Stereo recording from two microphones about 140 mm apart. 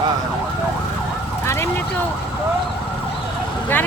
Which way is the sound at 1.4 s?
20° left (ahead or behind).